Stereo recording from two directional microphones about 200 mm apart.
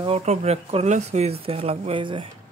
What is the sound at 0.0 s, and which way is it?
Speech, 30° right (ahead or behind).